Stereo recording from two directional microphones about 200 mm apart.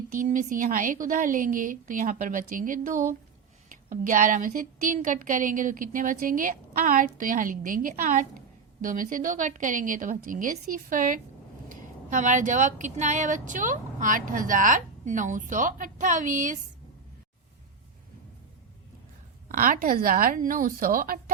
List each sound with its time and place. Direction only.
0.1 s a woman's voice: 40° right (ahead or behind)
19.5 s a woman's voice: 45° right (ahead or behind)